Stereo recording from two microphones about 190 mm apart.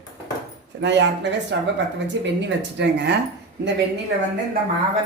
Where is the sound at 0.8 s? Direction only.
65° right (ahead or behind).